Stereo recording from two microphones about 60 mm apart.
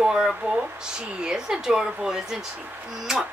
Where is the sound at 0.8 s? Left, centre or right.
Centre.